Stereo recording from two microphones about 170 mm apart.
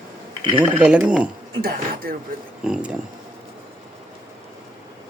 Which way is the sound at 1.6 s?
60° right (ahead or behind).